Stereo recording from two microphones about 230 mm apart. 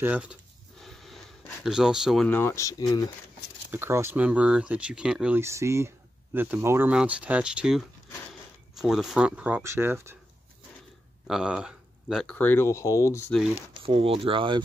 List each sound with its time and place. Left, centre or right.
0.0 s a sound: centre
3.7 s speech: centre
11.2 s speech: centre
13.8 s speech: right